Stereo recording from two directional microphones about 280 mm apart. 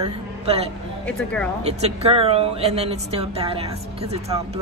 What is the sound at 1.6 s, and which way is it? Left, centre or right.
A woman's voice, right.